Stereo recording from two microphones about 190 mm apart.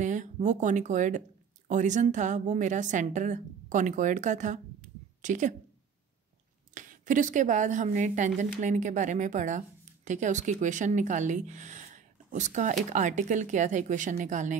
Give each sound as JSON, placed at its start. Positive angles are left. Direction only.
{"t": 0.0, "sound": "a woman's voice", "side_deg": -40}
{"t": 6.7, "sound": "a woman's voice", "side_deg": -45}